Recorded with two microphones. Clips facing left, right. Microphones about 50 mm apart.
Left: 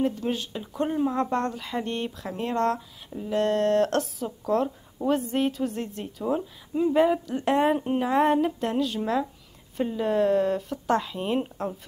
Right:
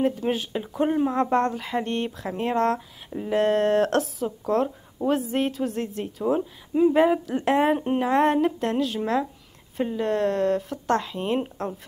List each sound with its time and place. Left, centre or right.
0.0 s speech: centre
1.1 s speech: centre
3.1 s speech: right
3.3 s speech: centre
6.7 s speech: centre
8.1 s speech: centre